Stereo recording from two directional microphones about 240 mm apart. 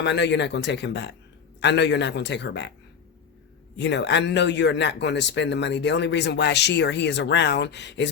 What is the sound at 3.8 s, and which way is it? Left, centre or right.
A man's voice, left.